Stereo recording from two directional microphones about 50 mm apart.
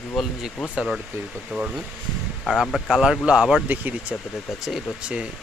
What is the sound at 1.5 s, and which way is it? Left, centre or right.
Speech, centre.